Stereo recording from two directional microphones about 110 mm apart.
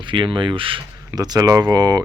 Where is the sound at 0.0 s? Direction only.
50° right (ahead or behind).